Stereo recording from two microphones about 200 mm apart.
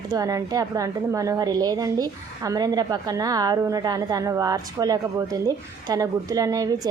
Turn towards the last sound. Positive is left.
turn(degrees=-15)  # may be behind; listen again after turning